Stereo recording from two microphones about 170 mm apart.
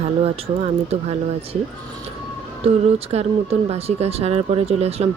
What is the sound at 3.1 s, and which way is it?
Speech, 40° right (ahead or behind).